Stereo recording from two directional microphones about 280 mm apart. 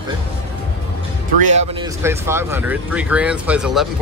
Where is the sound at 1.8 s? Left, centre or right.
Centre.